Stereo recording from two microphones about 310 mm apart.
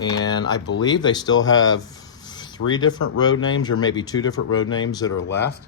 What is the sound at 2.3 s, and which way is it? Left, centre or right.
Rub, centre.